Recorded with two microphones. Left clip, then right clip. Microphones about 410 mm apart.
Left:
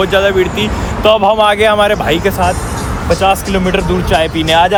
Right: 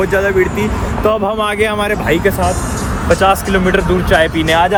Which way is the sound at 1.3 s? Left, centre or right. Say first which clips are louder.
Left 6 dB; centre.